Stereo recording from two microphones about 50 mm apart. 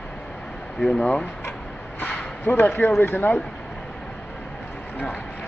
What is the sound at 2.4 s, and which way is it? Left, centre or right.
Speech, left.